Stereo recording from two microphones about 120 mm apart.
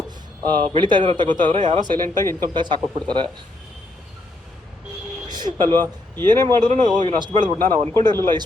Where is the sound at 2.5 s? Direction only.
40° right (ahead or behind).